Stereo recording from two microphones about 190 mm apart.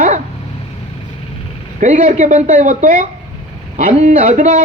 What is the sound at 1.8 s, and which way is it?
A man's voice, 45° right (ahead or behind).